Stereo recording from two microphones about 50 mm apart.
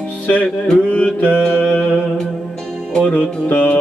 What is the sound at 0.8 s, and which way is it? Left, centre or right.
Mantra, left.